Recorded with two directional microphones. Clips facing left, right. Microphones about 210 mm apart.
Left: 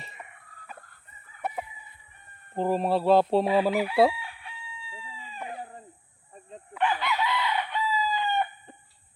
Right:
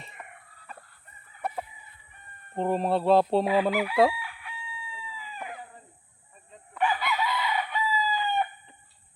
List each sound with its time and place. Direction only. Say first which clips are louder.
0.0 s a sound: even; centre (ahead or behind)
1.4 s chicken: even; 5° left (ahead or behind)
2.6 s speech: left 1 dB; centre (ahead or behind)
3.4 s speech: left 1 dB; 30° left (ahead or behind)
4.2 s crowing: right 2 dB; 25° left (ahead or behind)
6.7 s chicken: even; 5° right (ahead or behind)